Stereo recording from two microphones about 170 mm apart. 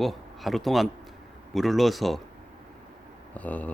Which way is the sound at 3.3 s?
10° left (ahead or behind).